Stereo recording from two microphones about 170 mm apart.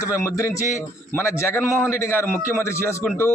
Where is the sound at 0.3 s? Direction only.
20° left (ahead or behind).